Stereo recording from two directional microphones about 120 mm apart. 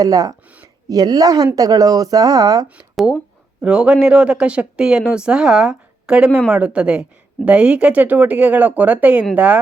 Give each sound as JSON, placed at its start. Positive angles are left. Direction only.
{"t": 0.0, "sound": "speech", "side_deg": -30}
{"t": 2.9, "sound": "speech", "side_deg": 0}